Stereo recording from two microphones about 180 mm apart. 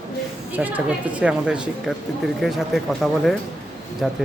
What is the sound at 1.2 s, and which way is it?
Speech, 5° right (ahead or behind).